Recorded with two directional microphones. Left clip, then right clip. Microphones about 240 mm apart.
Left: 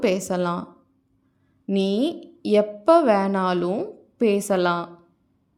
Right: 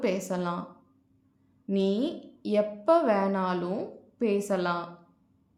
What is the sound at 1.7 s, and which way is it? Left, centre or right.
A woman's voice, left.